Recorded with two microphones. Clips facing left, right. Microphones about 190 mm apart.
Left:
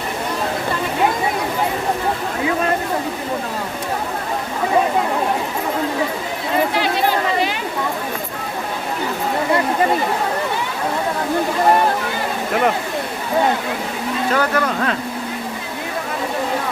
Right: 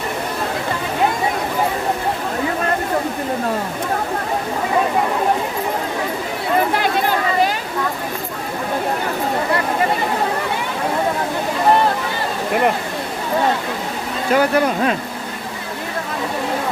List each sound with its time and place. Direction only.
14.3 s speech: 15° right (ahead or behind)